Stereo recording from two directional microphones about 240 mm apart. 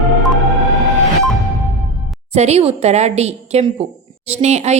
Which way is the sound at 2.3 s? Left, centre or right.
Right.